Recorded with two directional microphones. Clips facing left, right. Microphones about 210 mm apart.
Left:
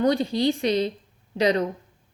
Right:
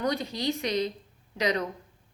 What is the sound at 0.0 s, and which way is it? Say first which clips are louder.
Speech: left 8 dB; 30° left (ahead or behind).